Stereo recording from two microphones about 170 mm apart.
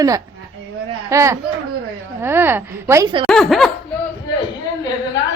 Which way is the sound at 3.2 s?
Centre (ahead or behind).